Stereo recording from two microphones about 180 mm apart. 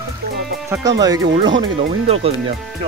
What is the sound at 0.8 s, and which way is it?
Speech, 20° right (ahead or behind).